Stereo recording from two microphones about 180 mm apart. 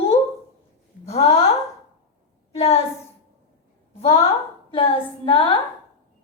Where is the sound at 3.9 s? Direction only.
35° left (ahead or behind).